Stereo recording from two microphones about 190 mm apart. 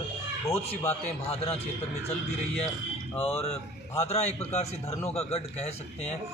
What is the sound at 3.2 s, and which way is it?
Speech, 30° left (ahead or behind).